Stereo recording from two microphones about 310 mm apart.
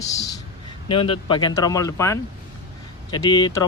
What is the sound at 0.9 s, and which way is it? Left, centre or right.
Speech, centre.